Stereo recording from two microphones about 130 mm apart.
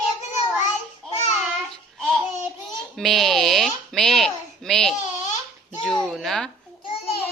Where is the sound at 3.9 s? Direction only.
Centre (ahead or behind).